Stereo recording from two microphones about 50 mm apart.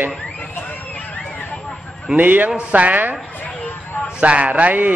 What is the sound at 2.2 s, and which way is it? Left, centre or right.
A man's voice, right.